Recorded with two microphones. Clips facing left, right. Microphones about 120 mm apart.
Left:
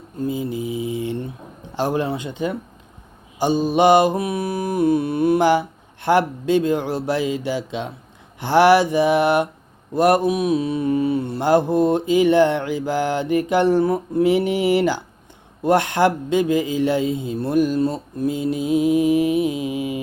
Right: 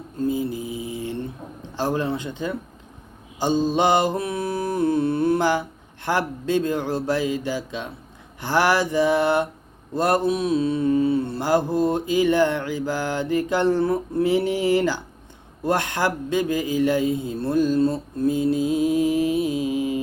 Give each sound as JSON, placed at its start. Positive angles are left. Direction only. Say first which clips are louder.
{"t": 0.2, "sound": "mantra", "louder": "even", "side_deg": 20}
{"t": 1.7, "sound": "speech", "louder": "left 2 dB", "side_deg": 15}